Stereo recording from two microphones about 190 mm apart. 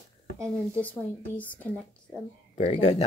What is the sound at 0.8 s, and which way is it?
Speech, 10° left (ahead or behind).